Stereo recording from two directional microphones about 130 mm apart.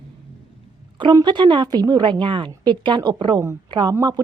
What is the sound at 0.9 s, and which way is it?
A woman's voice, 35° right (ahead or behind).